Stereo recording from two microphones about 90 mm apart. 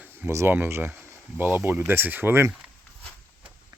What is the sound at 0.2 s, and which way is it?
Speech, 30° right (ahead or behind).